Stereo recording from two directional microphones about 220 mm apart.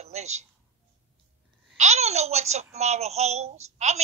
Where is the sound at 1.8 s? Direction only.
30° right (ahead or behind).